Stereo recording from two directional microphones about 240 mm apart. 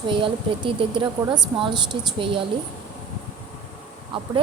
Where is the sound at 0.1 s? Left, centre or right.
Right.